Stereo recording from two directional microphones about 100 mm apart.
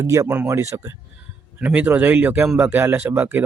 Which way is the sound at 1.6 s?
15° right (ahead or behind).